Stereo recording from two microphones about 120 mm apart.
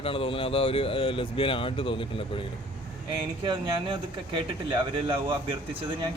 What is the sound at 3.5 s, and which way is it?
Speech, 40° right (ahead or behind).